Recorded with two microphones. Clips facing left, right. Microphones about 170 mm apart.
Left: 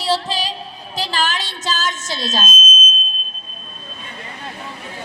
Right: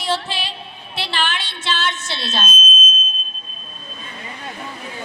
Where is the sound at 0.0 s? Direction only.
35° left (ahead or behind).